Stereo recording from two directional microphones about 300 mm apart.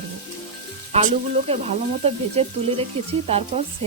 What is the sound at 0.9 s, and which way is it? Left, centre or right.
A woman's voice, right.